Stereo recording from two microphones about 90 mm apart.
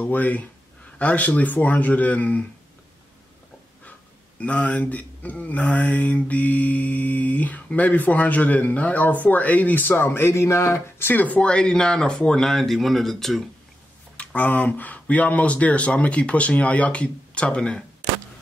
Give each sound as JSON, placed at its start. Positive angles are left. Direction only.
{"t": 0.0, "sound": "speech", "side_deg": 20}
{"t": 4.4, "sound": "speech", "side_deg": 15}
{"t": 14.1, "sound": "speech", "side_deg": 15}